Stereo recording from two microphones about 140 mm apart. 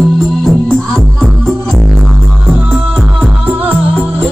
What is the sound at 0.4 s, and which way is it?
Music, 5° left (ahead or behind).